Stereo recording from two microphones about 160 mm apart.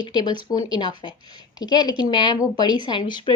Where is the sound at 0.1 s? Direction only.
25° left (ahead or behind).